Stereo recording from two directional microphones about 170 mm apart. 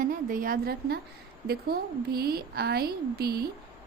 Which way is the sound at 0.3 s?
55° right (ahead or behind).